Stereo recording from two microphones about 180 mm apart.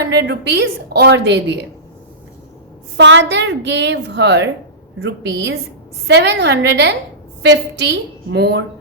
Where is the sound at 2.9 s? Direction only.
75° right (ahead or behind).